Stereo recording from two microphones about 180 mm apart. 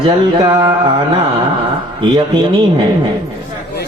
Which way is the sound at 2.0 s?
25° right (ahead or behind).